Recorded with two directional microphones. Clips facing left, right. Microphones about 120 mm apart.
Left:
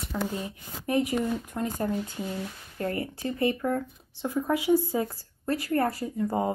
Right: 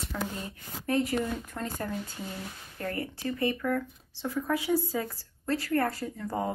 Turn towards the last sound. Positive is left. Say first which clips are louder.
# left 5 dB
turn(degrees=15)  # may be behind; listen again after turning